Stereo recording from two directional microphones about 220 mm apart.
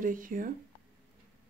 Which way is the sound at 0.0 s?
40° right (ahead or behind).